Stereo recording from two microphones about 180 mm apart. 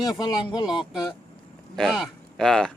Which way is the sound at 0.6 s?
5° right (ahead or behind).